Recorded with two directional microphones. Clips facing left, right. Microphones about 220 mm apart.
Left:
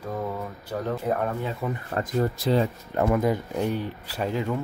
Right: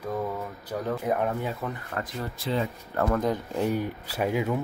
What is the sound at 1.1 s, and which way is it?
Speech, 10° right (ahead or behind).